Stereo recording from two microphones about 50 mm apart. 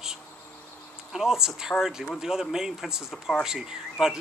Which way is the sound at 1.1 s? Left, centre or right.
Centre.